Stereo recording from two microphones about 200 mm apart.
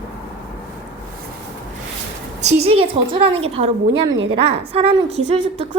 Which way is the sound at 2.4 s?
30° right (ahead or behind).